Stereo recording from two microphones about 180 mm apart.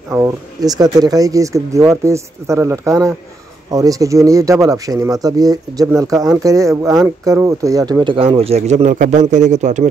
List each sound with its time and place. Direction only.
0.1 s a man's voice: 20° right (ahead or behind); by 9.8 s 40° right (ahead or behind)